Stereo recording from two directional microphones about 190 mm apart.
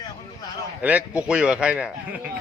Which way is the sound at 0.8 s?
10° right (ahead or behind).